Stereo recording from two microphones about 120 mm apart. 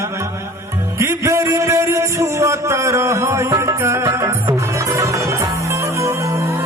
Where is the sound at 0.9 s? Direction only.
25° right (ahead or behind).